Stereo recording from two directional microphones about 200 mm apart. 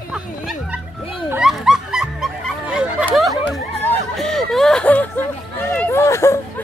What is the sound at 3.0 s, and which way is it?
Snicker, centre (ahead or behind).